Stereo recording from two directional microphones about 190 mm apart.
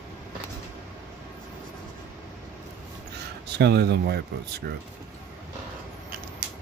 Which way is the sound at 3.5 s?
60° right (ahead or behind).